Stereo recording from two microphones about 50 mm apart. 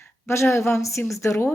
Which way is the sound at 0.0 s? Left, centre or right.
Left.